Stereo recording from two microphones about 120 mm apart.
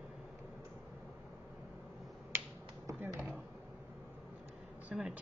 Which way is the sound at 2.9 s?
25° right (ahead or behind).